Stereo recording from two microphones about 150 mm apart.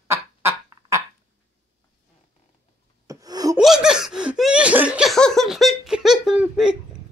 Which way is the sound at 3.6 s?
5° right (ahead or behind).